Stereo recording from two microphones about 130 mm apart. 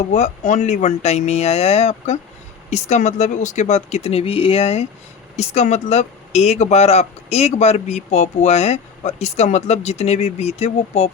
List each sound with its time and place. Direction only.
0.1 s speech: 65° left (ahead or behind)